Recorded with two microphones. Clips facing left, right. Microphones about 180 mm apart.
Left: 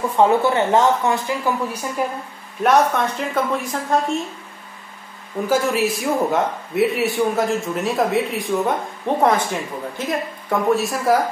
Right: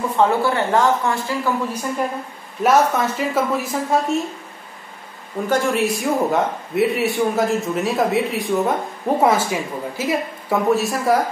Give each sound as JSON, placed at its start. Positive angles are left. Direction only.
{"t": 0.2, "sound": "speech", "side_deg": 20}
{"t": 2.6, "sound": "a man's voice", "side_deg": -5}
{"t": 5.5, "sound": "a man's voice", "side_deg": 5}